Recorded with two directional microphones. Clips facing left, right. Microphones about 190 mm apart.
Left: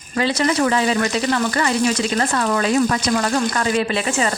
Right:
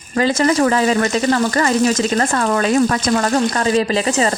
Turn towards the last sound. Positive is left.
turn(degrees=-35)  # may be behind; listen again after turning